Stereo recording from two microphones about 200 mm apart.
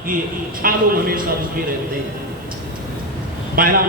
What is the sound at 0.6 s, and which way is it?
Speech, 45° right (ahead or behind).